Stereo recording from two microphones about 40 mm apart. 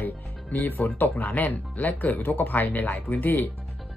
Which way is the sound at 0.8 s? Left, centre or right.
Left.